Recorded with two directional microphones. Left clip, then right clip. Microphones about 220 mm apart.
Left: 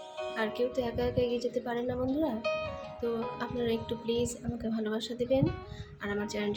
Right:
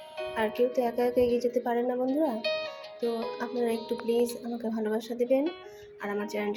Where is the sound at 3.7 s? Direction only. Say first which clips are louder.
Right 2 dB; 40° right (ahead or behind).